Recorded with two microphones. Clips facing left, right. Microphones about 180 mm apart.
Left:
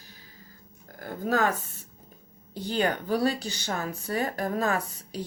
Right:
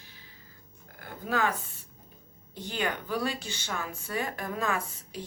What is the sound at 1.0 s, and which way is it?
Speech, 40° left (ahead or behind).